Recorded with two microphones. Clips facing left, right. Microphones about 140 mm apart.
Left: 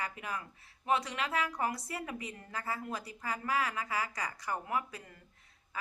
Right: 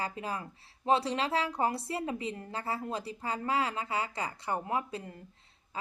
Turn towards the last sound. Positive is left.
turn(degrees=-30)  # may be behind; listen again after turning